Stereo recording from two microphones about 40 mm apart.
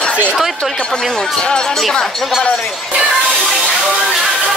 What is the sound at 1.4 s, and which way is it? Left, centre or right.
Speech, left.